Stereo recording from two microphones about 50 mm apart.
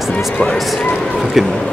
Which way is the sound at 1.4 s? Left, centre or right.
Centre.